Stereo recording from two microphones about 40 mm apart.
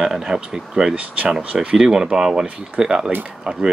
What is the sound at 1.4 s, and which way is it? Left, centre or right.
Speech, right.